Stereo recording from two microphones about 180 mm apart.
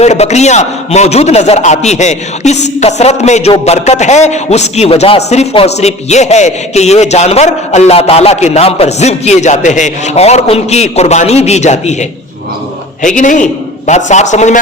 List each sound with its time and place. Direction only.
0.0 s a man's voice: 40° left (ahead or behind)